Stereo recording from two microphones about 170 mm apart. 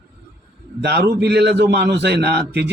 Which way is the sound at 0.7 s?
80° right.